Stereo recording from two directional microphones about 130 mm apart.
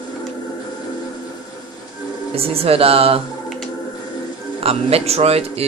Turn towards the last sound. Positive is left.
turn(degrees=-50)  # may be behind; listen again after turning